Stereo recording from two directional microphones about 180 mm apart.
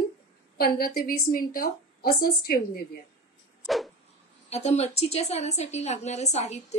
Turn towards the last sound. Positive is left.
turn(degrees=40)  # may be behind; listen again after turning